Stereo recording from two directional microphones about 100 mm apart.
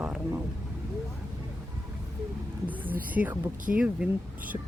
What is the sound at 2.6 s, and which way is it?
Speech, 15° right (ahead or behind).